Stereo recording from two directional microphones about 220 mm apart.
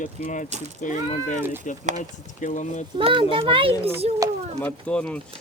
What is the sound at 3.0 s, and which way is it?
Speech, 20° right (ahead or behind).